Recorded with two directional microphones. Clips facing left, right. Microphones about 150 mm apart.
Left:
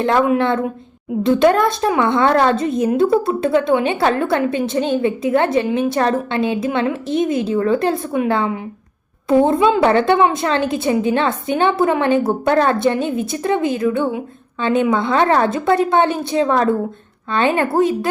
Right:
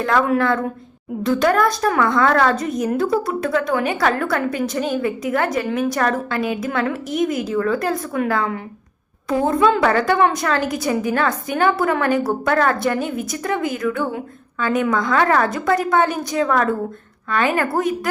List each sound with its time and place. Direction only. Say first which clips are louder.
0.0 s a woman's voice: left 3 dB; 25° left (ahead or behind)